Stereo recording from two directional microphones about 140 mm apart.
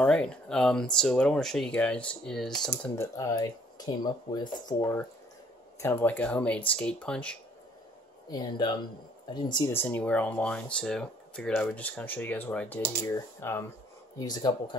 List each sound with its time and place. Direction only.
0.0 s speech: 5° left (ahead or behind)
3.0 s speech: 25° left (ahead or behind)
5.8 s speech: 15° left (ahead or behind)
8.3 s speech: 30° left (ahead or behind)
9.7 s speech: 15° left (ahead or behind)